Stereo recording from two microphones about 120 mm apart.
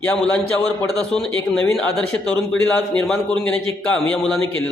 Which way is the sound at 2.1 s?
5° left (ahead or behind).